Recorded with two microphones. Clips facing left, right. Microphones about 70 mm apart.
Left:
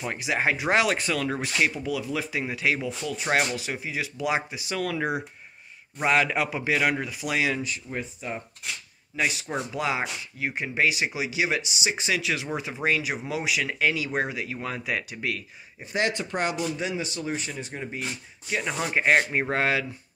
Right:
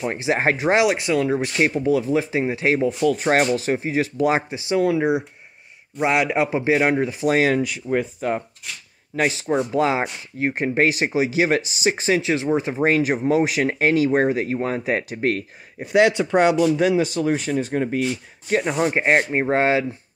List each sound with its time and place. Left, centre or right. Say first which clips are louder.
0.0 s speech: right 6 dB; right
0.7 s speech: right 6 dB; centre
1.9 s speech: right 10 dB; right
3.0 s speech: right 12 dB; right
3.3 s speech: right 3 dB; right
4.4 s speech: right 9 dB; right
7.3 s speech: right 7 dB; right
8.0 s speech: right 10 dB; right
9.4 s speech: right 10 dB; centre
9.7 s speech: right 8 dB; right
15.9 s speech: right 11 dB; right
16.7 s speech: right 12 dB; right
18.6 s speech: right 4 dB; right